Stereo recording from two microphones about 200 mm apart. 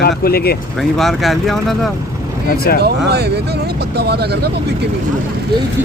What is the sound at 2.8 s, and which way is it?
Speech, 55° right (ahead or behind).